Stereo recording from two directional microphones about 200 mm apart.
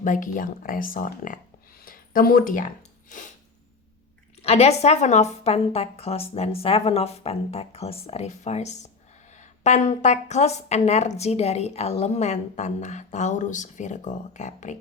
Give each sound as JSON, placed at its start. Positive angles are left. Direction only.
{"t": 0.0, "sound": "a woman's voice", "side_deg": 40}
{"t": 1.8, "sound": "a sound", "side_deg": 45}
{"t": 4.4, "sound": "a woman's voice", "side_deg": 30}